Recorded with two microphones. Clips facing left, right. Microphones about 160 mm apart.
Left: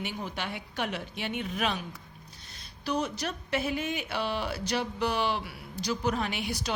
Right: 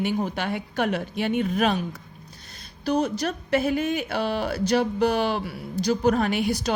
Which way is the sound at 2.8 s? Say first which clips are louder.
Right 7 dB; 40° right (ahead or behind).